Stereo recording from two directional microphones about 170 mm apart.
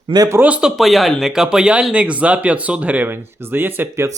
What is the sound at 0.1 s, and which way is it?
Speech, 20° right (ahead or behind).